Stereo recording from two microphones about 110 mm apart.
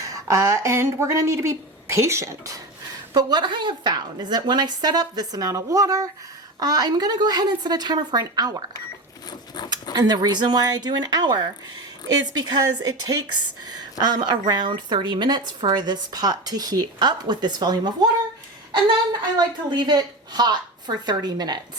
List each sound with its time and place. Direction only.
0.0 s speech: 30° right (ahead or behind)
3.2 s a woman's voice: 40° right (ahead or behind)
9.6 s a sound: 40° left (ahead or behind)
9.9 s a woman's voice: 40° right (ahead or behind)
14.0 s a woman's voice: 40° right (ahead or behind)
19.4 s a woman's voice: 45° right (ahead or behind)